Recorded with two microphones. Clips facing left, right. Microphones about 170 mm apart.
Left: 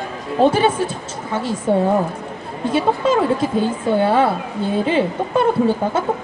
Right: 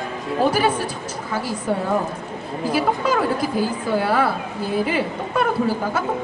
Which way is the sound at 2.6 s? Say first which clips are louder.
Left 3 dB; 25° left (ahead or behind).